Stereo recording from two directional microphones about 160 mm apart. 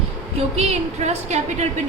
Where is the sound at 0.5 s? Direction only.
40° right (ahead or behind).